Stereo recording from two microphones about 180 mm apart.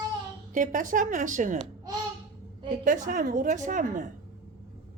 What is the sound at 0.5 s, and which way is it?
A woman's voice, 45° right (ahead or behind).